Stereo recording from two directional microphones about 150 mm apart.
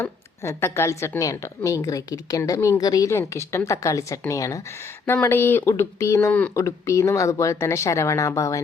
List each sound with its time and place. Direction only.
0.0 s a woman's voice: 15° left (ahead or behind)